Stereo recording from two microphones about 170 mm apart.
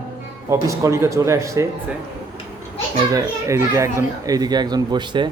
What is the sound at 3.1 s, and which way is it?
A child's voice, 20° right (ahead or behind).